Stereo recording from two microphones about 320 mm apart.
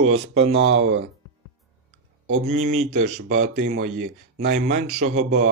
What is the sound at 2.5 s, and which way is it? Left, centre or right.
Speech, right.